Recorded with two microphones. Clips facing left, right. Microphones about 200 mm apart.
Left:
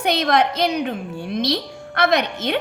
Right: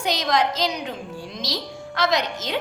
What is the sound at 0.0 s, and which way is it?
A woman's voice, 60° left (ahead or behind).